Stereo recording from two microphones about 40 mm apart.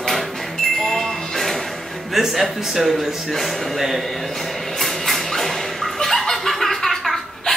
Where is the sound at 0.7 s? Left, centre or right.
Centre.